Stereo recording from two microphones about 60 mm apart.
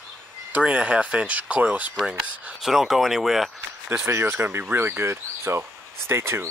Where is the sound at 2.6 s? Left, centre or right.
Centre.